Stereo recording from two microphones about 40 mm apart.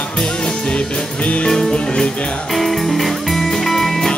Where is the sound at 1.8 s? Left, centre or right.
Left.